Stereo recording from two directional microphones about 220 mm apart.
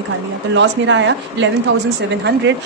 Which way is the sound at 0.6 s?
60° right (ahead or behind).